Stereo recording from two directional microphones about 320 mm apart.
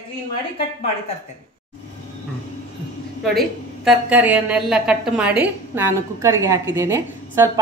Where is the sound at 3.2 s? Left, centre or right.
Centre.